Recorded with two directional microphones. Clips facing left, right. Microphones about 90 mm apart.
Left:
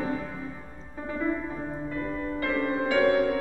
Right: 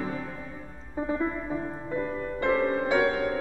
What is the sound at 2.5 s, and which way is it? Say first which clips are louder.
Music: right 3 dB; 25° right (ahead or behind).